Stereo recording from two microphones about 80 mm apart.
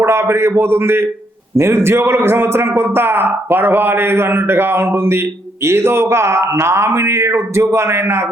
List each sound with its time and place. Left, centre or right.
0.0 s a man's voice: right